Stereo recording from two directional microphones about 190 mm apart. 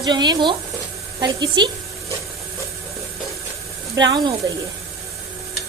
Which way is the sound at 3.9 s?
20° right (ahead or behind).